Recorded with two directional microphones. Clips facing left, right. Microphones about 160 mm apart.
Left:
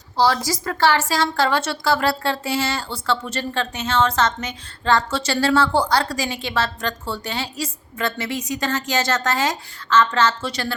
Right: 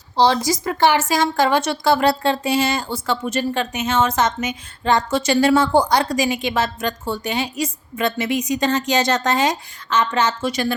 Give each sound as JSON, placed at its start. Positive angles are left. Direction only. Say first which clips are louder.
{"t": 0.2, "sound": "a woman's voice", "louder": "right 3 dB", "side_deg": -20}